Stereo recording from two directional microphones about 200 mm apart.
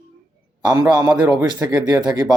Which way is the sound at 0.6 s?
20° right (ahead or behind).